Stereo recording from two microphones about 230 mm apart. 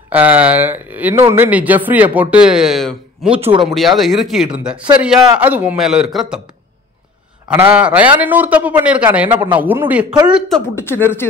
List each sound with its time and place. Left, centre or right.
0.1 s speech: centre
3.3 s speech: right
3.6 s a man's voice: centre
7.4 s a man's voice: centre
10.7 s speech: centre